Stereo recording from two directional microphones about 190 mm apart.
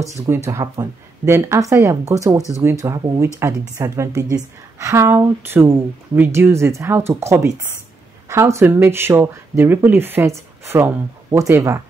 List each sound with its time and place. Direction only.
0.3 s speech: 15° right (ahead or behind)